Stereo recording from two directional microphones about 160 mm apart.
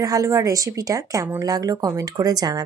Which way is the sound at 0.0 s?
20° right (ahead or behind).